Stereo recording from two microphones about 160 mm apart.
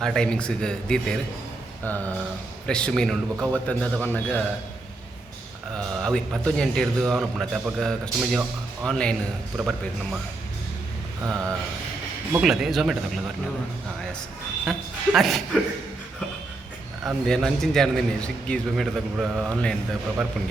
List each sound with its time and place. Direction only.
0.0 s a man's voice: 5° left (ahead or behind)
5.7 s a man's voice: 5° left (ahead or behind)
11.3 s mantra: 20° right (ahead or behind)
12.4 s a man's voice: centre (ahead or behind)
14.7 s speech: centre (ahead or behind)
17.0 s a man's voice: centre (ahead or behind)